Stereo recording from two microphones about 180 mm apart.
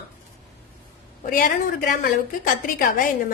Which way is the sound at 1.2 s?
50° left (ahead or behind).